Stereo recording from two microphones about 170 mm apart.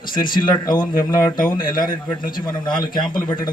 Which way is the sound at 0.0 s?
55° left (ahead or behind).